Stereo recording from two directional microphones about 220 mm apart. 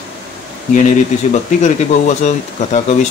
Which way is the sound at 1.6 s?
30° left (ahead or behind).